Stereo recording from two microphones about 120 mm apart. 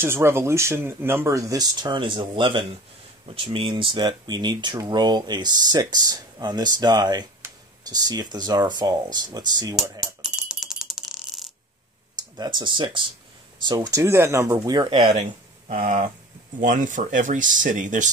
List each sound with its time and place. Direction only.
0.0 s speech: 20° right (ahead or behind); by 9.8 s 35° right (ahead or behind)
10.2 s coin: 5° right (ahead or behind)
12.4 s speech: 40° right (ahead or behind)
13.7 s speech: 30° right (ahead or behind)
14.7 s speech: 35° right (ahead or behind)
15.7 s speech: 75° right (ahead or behind)
16.5 s speech: 90° right